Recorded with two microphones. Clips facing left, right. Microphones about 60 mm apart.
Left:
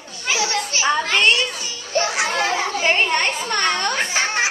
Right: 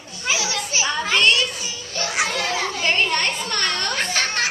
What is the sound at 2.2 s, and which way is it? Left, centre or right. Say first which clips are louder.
A child's voice: left 3 dB; left.